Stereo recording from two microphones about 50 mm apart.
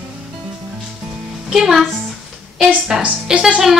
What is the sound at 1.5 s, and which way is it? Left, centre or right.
Speech, centre.